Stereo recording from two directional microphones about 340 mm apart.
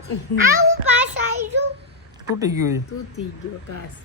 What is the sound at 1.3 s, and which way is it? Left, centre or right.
Child singing, right.